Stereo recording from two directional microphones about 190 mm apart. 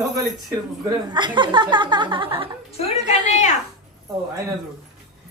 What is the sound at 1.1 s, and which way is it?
Speech, 25° right (ahead or behind).